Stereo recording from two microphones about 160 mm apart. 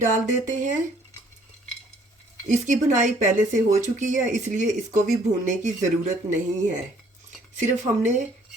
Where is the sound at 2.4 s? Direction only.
50° right (ahead or behind).